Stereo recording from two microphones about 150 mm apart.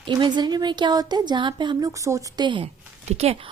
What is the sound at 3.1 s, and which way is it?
Speech, 45° right (ahead or behind).